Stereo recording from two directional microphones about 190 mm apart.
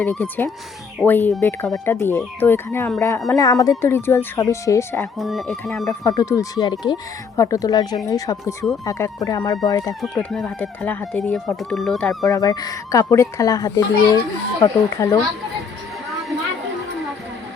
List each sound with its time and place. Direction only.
0.0 s a child's voice: 10° left (ahead or behind)
5.1 s speech: centre (ahead or behind)
6.1 s a child's voice: 15° left (ahead or behind)
10.0 s speech: 5° left (ahead or behind)
12.2 s a child's voice: 20° left (ahead or behind)